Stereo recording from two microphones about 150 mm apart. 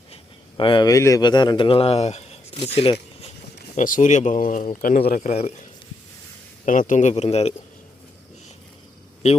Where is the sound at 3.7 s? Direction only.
60° left (ahead or behind); by 5.2 s 75° left (ahead or behind).